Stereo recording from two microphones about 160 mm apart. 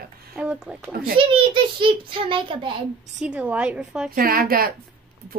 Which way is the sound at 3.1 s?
5° right (ahead or behind).